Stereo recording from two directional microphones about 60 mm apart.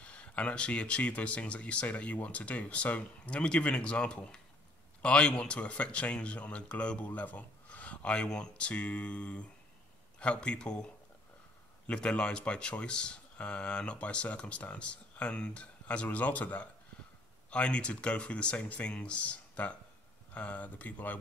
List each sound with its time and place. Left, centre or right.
0.0 s speech: left
11.9 s speech: centre